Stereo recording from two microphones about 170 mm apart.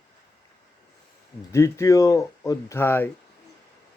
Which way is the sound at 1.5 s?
15° left (ahead or behind).